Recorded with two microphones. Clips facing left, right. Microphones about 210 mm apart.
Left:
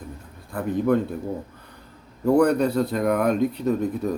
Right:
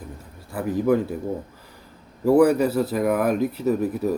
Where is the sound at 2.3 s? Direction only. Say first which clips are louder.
Right 2 dB; 5° right (ahead or behind).